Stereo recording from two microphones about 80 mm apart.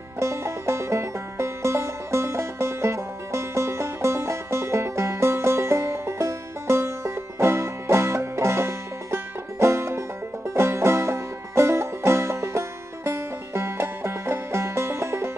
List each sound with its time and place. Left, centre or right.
0.2 s music: right